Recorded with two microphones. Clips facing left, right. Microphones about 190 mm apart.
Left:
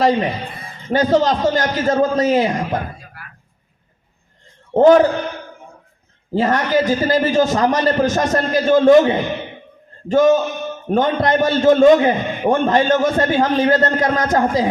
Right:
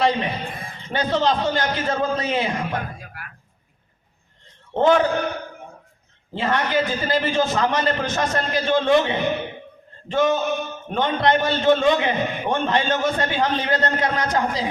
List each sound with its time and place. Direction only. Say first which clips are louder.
0.0 s a man's voice: left 5 dB; 40° left (ahead or behind)
4.7 s a man's voice: left 7 dB; 40° left (ahead or behind)
6.3 s a man's voice: left 5 dB; 40° left (ahead or behind)